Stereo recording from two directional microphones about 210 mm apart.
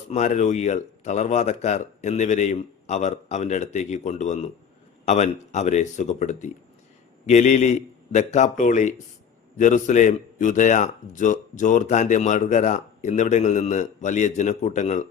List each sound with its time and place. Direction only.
0.1 s a man's voice: 35° left (ahead or behind)